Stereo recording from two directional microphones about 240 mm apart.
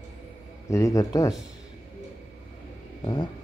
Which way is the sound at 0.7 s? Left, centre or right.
Centre.